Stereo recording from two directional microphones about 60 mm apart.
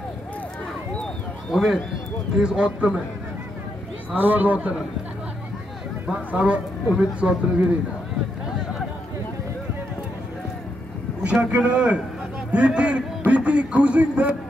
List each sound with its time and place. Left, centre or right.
1.5 s speech: centre
2.3 s speech: centre
4.1 s a man's voice: right
6.0 s a man's voice: right
11.5 s a man's voice: centre